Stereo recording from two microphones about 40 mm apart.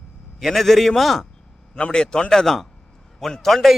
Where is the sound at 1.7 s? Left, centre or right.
Left; by 3.8 s centre.